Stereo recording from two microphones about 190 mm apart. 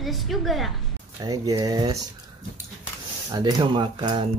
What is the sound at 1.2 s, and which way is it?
Speech, 20° right (ahead or behind).